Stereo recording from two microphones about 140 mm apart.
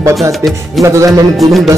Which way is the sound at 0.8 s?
20° right (ahead or behind).